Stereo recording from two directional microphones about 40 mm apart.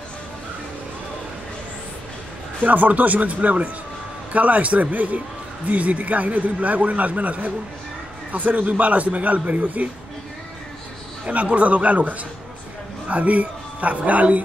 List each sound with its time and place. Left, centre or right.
2.6 s a man's voice: right
11.2 s a man's voice: right